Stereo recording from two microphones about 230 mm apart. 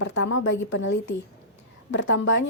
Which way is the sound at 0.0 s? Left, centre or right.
Left.